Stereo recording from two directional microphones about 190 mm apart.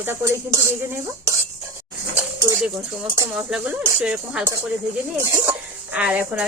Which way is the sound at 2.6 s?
5° right (ahead or behind).